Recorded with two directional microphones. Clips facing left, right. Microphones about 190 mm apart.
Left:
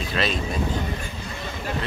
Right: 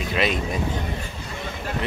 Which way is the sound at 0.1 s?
15° right (ahead or behind).